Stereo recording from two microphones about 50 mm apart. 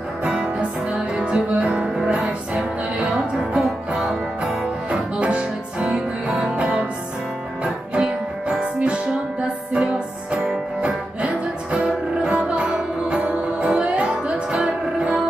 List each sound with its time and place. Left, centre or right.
0.2 s music: right
1.5 s music: right
2.0 s music: centre
4.9 s music: right
7.6 s music: centre
11.1 s music: right